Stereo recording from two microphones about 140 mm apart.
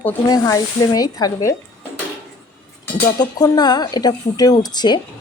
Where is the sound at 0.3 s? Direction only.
25° left (ahead or behind).